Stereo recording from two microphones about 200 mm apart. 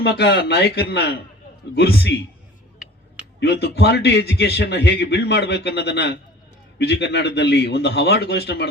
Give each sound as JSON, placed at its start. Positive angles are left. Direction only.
{"t": 0.0, "sound": "a man's voice", "side_deg": 55}
{"t": 3.4, "sound": "a man's voice", "side_deg": 55}